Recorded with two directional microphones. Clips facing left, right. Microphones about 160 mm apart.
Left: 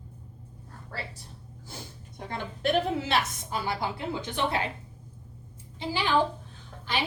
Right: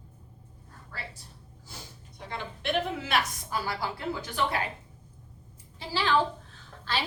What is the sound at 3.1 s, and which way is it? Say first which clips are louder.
A woman's voice: left 1 dB; 20° left (ahead or behind).